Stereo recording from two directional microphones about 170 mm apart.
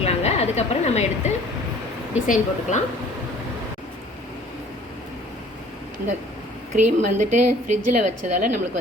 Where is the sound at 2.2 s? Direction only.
50° left (ahead or behind).